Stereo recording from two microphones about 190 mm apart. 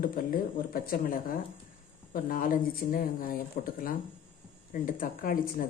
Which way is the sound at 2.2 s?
45° left (ahead or behind).